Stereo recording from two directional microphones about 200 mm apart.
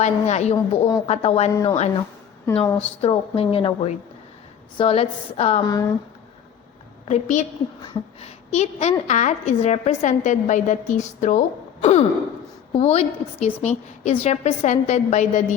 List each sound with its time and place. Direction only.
0.0 s a woman's voice: 35° left (ahead or behind)
3.0 s a woman's voice: 30° left (ahead or behind)
5.6 s a woman's voice: 20° left (ahead or behind)
7.1 s a woman's voice: 35° left (ahead or behind)